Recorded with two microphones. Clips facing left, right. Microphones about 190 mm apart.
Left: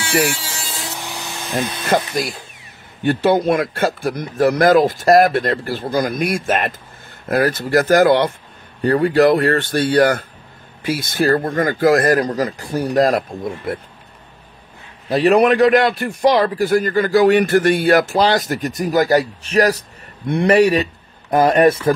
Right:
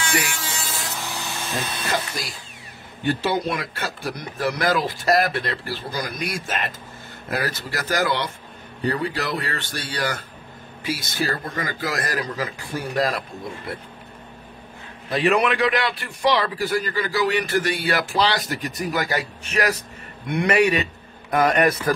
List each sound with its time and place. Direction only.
1.0 s a sound: 15° left (ahead or behind)
2.1 s a man's voice: 60° left (ahead or behind)
15.0 s a man's voice: 40° left (ahead or behind)